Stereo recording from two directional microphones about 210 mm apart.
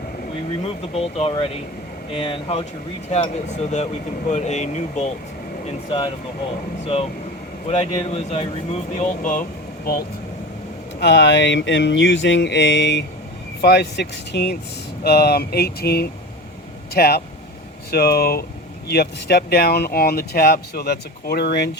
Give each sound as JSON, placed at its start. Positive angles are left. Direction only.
{"t": 0.8, "sound": "speech", "side_deg": 25}
{"t": 6.8, "sound": "speech", "side_deg": 30}
{"t": 11.0, "sound": "a sound", "side_deg": 55}
{"t": 13.6, "sound": "speech", "side_deg": 50}